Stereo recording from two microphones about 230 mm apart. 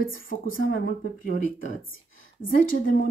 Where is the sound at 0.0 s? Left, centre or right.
Left.